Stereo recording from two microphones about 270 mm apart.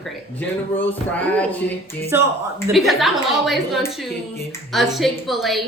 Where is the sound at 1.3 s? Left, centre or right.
Centre.